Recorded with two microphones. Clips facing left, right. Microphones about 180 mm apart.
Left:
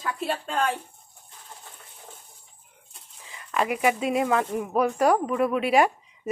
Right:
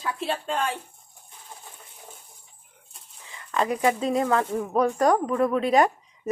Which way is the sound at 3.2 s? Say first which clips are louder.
Right 1 dB; 15° left (ahead or behind).